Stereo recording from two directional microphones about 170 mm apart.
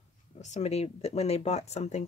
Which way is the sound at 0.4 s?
40° left (ahead or behind).